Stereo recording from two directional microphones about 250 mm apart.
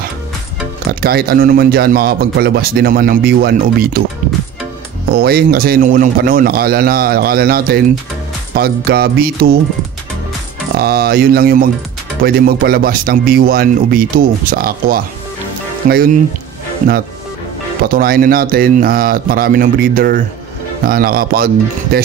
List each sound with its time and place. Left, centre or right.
1.0 s speech: right
5.1 s speech: right
10.8 s speech: right
17.8 s speech: right